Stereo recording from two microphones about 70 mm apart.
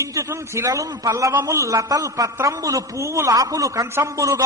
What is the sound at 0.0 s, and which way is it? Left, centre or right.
Speech, right.